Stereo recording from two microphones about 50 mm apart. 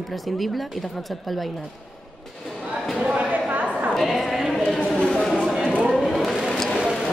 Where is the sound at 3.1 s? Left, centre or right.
Right.